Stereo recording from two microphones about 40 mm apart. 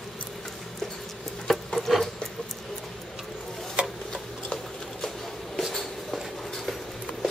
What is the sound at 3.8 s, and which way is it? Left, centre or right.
Tick-tock, right.